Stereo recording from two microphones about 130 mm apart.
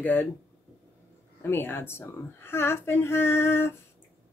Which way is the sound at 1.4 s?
20° left (ahead or behind).